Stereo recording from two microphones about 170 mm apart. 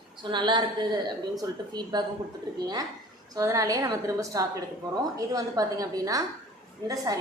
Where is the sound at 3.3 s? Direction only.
20° right (ahead or behind).